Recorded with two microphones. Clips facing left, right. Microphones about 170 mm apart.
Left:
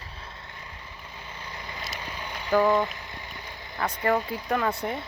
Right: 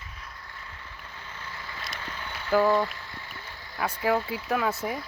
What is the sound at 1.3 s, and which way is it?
Vehicle, 15° left (ahead or behind).